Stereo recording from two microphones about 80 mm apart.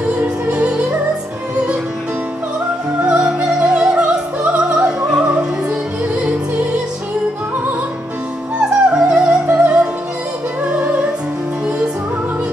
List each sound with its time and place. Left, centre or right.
0.0 s music: centre
3.0 s music: centre
8.5 s music: centre